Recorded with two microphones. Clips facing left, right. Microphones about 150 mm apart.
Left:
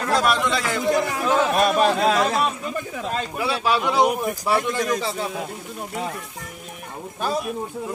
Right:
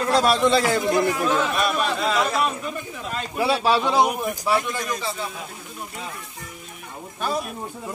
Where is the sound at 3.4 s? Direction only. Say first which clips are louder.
Right 2 dB; 35° right (ahead or behind).